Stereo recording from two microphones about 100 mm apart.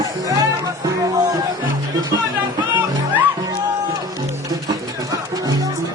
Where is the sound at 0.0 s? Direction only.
35° right (ahead or behind).